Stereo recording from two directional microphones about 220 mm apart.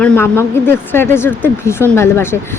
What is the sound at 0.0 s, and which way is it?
Speech, 10° left (ahead or behind).